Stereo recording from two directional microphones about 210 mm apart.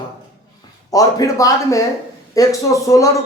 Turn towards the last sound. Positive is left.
turn(degrees=15)  # may be behind; listen again after turning